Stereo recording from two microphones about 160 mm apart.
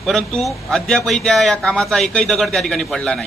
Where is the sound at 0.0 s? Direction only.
5° left (ahead or behind).